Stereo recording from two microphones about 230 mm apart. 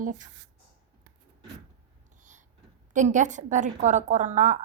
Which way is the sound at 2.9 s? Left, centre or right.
Right.